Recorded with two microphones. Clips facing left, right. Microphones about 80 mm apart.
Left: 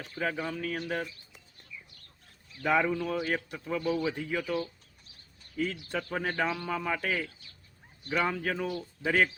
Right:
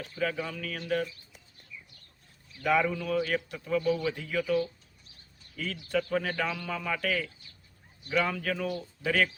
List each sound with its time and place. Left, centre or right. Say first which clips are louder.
0.2 s a man's voice: even; left
2.6 s a man's voice: even; left